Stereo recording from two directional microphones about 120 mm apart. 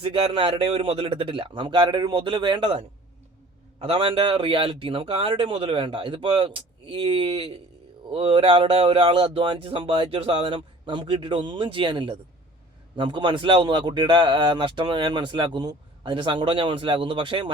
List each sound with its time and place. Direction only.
0.0 s a man's voice: 50° right (ahead or behind)